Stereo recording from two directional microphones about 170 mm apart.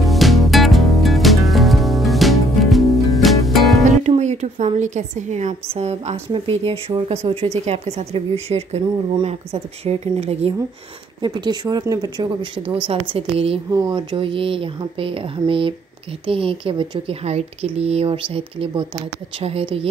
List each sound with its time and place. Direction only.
0.0 s music: centre (ahead or behind)
3.8 s a woman's voice: 40° right (ahead or behind)
11.1 s a woman's voice: 25° right (ahead or behind)
13.7 s a woman's voice: 20° right (ahead or behind)